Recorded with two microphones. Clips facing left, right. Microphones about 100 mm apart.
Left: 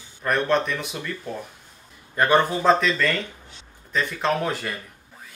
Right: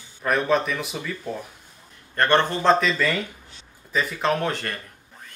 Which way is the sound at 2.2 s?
10° left (ahead or behind).